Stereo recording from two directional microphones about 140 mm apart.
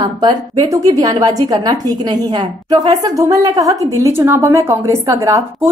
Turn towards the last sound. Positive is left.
turn(degrees=-20)  # may be behind; listen again after turning